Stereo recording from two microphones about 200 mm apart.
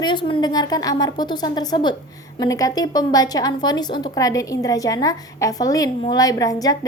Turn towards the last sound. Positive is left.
turn(degrees=20)  # may be behind; listen again after turning